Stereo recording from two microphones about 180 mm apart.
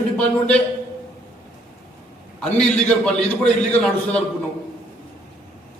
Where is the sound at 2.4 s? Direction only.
5° left (ahead or behind).